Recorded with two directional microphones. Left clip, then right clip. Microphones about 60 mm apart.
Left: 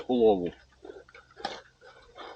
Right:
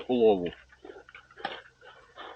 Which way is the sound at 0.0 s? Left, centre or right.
Centre.